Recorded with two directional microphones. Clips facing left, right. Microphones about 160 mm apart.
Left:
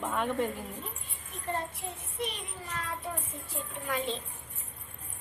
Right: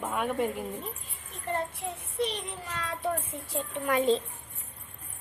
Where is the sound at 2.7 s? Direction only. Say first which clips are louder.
Right 6 dB; 80° right.